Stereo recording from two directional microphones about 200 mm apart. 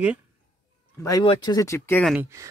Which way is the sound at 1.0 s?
20° left (ahead or behind).